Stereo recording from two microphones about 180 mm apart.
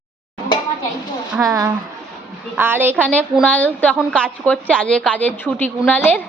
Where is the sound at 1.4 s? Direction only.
15° right (ahead or behind).